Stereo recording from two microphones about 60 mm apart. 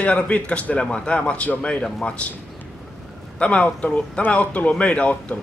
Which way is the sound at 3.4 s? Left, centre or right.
Left.